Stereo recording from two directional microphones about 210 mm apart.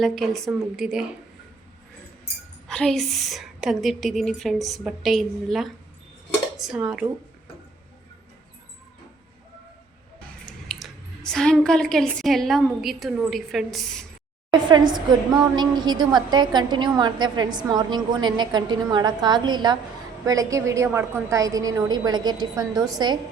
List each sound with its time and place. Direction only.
0.0 s a woman's voice: centre (ahead or behind)
2.6 s a woman's voice: 5° left (ahead or behind)
10.4 s speech: centre (ahead or behind)
14.5 s a woman's voice: 20° right (ahead or behind)